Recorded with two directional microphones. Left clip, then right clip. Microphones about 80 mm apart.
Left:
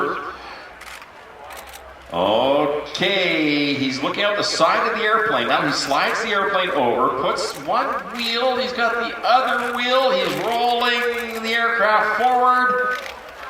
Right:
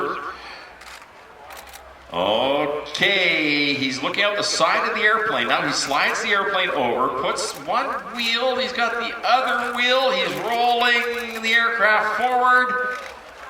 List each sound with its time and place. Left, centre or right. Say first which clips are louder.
2.1 s mantra: left 3 dB; right
6.7 s a man's voice: left 3 dB; right
10.3 s a sound: even; right
10.8 s a man's voice: right 1 dB; right
11.0 s a man's voice: left 3 dB; right
11.4 s a man's voice: right 1 dB; right
12.4 s speech: right 3 dB; right